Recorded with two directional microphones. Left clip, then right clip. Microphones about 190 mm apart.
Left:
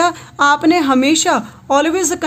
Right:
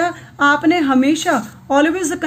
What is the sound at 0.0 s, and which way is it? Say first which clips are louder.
A woman's voice: left 2 dB; 45° left (ahead or behind).